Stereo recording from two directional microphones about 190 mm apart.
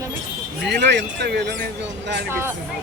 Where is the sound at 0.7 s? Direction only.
65° right (ahead or behind).